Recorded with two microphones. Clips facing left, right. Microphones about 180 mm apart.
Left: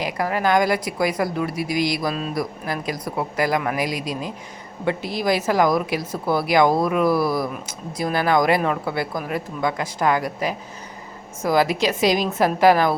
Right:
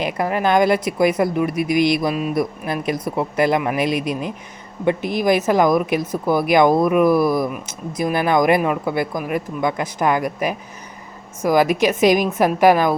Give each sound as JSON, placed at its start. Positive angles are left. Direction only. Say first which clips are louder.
{"t": 0.0, "sound": "a woman's voice", "louder": "right 2 dB", "side_deg": -25}